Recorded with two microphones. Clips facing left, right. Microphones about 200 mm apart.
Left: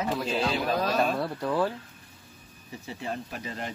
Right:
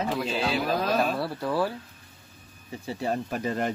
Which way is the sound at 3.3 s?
50° right (ahead or behind).